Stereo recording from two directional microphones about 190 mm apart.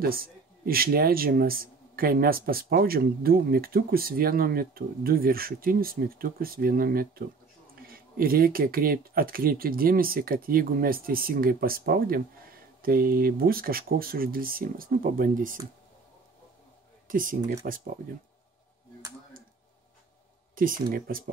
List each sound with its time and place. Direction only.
0.0 s speech: 50° right (ahead or behind)
17.1 s speech: 45° right (ahead or behind)
20.5 s speech: 45° right (ahead or behind)